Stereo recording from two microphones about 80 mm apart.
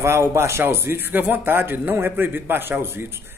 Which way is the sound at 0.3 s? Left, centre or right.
Right.